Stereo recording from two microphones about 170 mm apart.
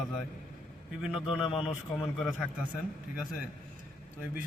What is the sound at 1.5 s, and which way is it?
Speech, 30° left (ahead or behind).